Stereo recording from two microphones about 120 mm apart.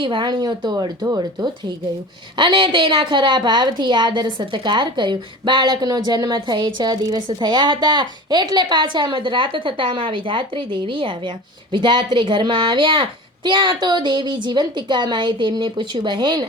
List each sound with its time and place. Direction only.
0.0 s a woman's voice: 45° right (ahead or behind)